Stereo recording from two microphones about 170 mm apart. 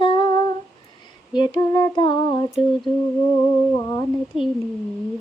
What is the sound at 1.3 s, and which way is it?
Humming, 25° left (ahead or behind).